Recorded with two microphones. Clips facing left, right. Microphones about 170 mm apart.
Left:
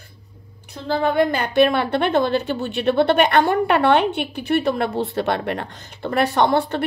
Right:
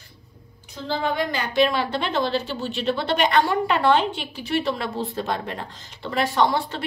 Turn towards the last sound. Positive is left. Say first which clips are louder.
# left 4 dB
turn(degrees=55)  # may be behind; listen again after turning